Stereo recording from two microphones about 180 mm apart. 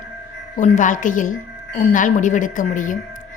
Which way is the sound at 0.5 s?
45° left (ahead or behind).